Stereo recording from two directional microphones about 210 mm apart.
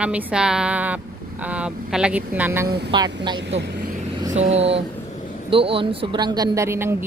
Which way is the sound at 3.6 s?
55° right (ahead or behind).